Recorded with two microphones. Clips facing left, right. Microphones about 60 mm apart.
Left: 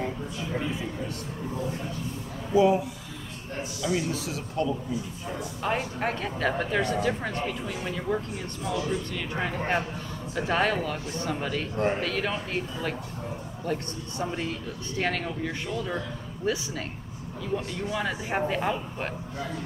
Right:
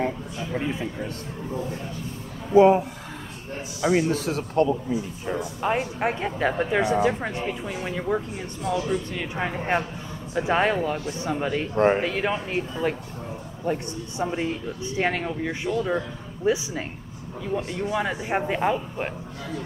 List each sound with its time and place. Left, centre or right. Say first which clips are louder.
0.0 s speech: right 4 dB; right
2.5 s speech: right 6 dB; right
3.8 s speech: right 7 dB; right
5.4 s speech: right 3 dB; centre
11.7 s speech: right 8 dB; right
12.0 s speech: right 4 dB; right
13.7 s speech: right 4 dB; centre
17.8 s speech: right 4 dB; centre